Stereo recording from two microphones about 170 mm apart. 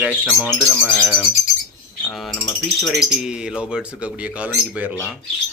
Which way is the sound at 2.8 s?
Centre (ahead or behind).